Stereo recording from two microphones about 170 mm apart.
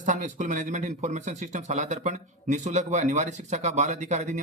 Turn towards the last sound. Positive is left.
turn(degrees=-45)  # may be behind; listen again after turning